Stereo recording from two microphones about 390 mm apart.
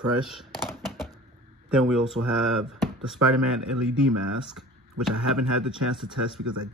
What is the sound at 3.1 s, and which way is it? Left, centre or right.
Speech, right.